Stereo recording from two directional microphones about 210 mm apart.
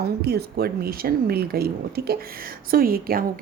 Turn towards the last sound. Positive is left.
turn(degrees=-45)  # may be behind; listen again after turning